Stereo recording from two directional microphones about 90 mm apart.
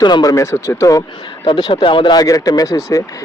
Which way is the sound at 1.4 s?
65° left (ahead or behind).